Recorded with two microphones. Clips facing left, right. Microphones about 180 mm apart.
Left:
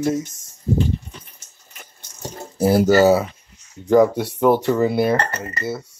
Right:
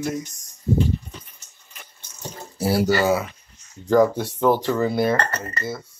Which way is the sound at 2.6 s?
45° left (ahead or behind).